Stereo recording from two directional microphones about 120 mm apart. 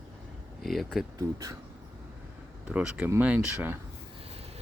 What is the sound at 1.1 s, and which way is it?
Speech, 30° right (ahead or behind).